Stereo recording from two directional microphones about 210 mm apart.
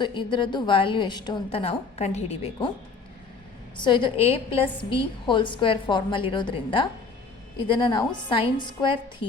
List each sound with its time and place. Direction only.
0.0 s a woman's voice: 20° left (ahead or behind)
3.8 s a woman's voice: 20° left (ahead or behind)
7.9 s a woman's voice: 20° left (ahead or behind)